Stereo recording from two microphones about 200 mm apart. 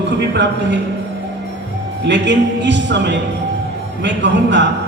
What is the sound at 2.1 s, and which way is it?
A man's voice, 60° right (ahead or behind).